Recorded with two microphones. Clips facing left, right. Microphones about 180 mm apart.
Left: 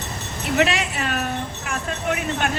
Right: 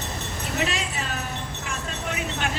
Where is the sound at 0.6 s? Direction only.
70° left (ahead or behind).